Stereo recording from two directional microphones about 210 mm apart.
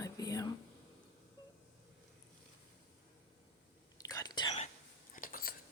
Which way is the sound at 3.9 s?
15° left (ahead or behind).